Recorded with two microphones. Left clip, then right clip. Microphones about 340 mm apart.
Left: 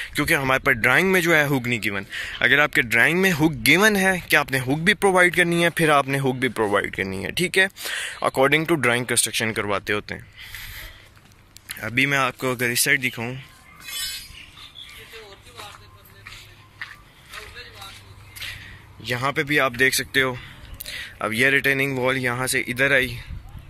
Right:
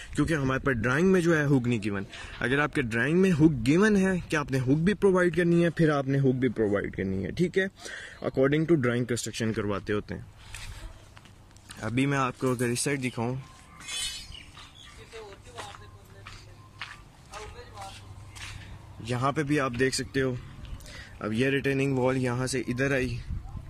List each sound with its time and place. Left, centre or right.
0.0 s speech: centre
6.5 s speech: left
8.5 s speech: centre
8.7 s speech: left
9.0 s speech: centre
11.7 s speech: centre
19.0 s speech: centre